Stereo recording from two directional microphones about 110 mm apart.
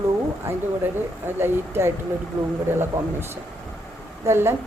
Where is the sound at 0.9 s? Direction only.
20° right (ahead or behind).